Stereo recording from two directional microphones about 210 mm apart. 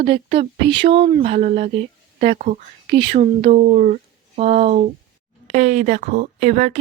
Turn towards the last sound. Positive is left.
turn(degrees=-30)  # may be behind; listen again after turning